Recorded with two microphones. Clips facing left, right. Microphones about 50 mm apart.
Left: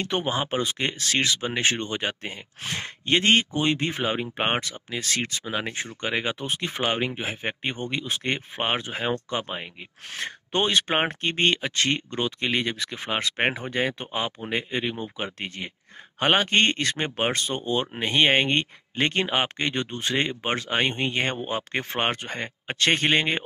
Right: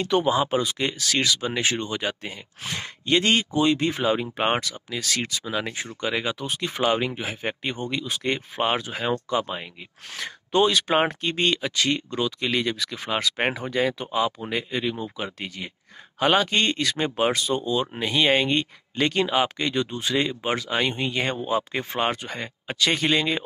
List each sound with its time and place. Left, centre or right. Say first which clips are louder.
0.0 s speech: right 5 dB; left
10.2 s speech: right 4 dB; left
13.7 s speech: right 2 dB; left